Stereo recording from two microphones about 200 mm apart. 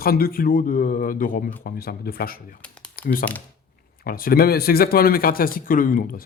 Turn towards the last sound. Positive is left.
turn(degrees=45)  # may be behind; listen again after turning